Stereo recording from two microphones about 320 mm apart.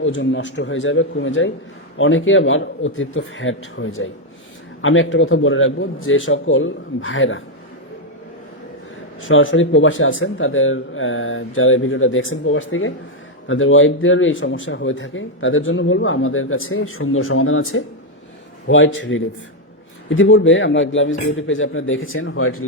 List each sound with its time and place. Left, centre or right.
0.0 s speech: left
9.2 s speech: left